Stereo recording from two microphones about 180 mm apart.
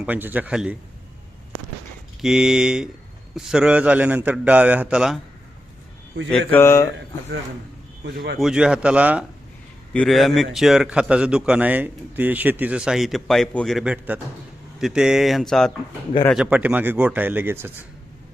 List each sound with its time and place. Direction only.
0.0 s a man's voice: 10° right (ahead or behind)
2.2 s a man's voice: 5° right (ahead or behind)
6.5 s speech: 15° left (ahead or behind)
8.0 s speech: 70° right (ahead or behind)
8.4 s a man's voice: 5° right (ahead or behind)